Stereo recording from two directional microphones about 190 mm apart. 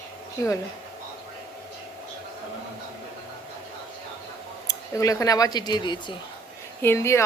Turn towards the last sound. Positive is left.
turn(degrees=15)  # may be behind; listen again after turning